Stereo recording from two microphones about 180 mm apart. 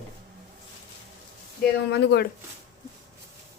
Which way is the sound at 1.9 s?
70° left (ahead or behind).